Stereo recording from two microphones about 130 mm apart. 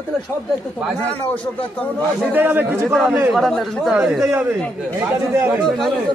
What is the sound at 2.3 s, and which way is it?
Speech, 15° right (ahead or behind).